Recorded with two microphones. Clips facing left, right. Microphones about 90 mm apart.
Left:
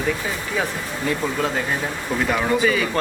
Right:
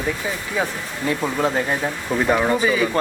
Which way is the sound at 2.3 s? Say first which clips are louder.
Right 1 dB; 15° right (ahead or behind).